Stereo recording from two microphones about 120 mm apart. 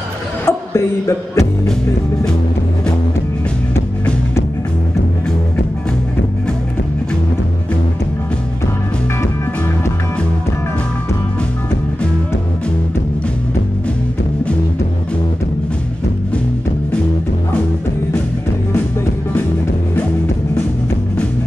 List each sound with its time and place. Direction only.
0.5 s music: 20° left (ahead or behind)